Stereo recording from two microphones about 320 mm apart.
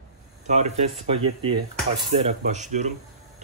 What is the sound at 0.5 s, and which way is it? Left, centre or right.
Speech, right.